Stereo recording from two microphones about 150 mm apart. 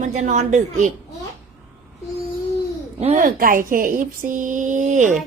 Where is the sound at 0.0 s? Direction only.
55° right (ahead or behind).